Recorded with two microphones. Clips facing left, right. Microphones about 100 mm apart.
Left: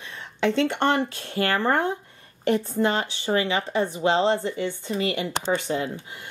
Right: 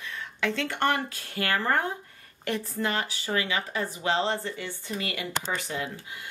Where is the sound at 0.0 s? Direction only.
20° left (ahead or behind).